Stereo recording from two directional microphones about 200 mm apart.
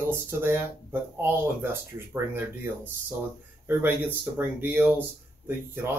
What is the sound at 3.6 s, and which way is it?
Speech, 10° right (ahead or behind).